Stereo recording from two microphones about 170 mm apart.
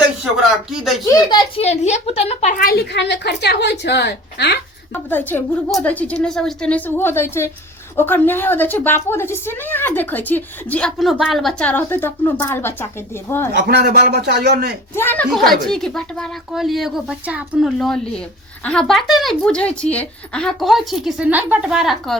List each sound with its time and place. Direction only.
0.5 s speech: centre (ahead or behind)
1.0 s a child's voice: 25° left (ahead or behind)
1.6 s a woman's voice: 40° left (ahead or behind)
2.6 s a woman's voice: 65° left (ahead or behind)
5.0 s a woman's voice: 10° left (ahead or behind)
13.5 s a man's voice: 75° right (ahead or behind)
14.9 s a woman's voice: 10° left (ahead or behind)